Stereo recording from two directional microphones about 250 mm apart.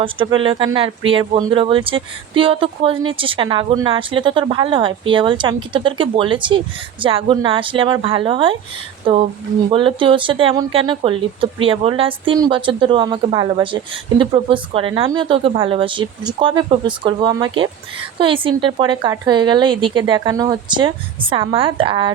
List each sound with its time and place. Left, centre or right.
0.0 s speech: centre